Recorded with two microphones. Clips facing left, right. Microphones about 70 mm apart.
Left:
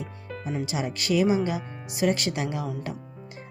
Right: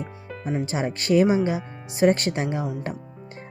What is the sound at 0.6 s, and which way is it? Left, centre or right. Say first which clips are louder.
Speech: right 3 dB; right.